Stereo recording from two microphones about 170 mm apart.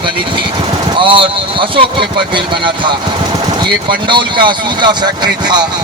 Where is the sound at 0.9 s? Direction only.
30° right (ahead or behind).